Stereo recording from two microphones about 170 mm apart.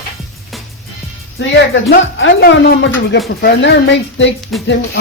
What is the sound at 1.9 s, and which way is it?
Speech, 80° left.